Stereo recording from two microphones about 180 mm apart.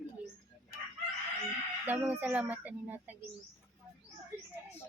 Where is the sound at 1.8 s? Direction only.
10° right (ahead or behind).